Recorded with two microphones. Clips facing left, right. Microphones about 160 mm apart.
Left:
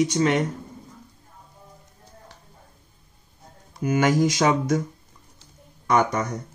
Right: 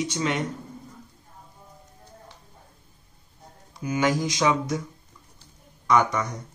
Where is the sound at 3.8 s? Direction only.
50° left (ahead or behind).